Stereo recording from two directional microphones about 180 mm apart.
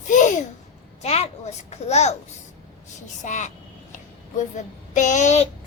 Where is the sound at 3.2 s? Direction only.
40° left (ahead or behind).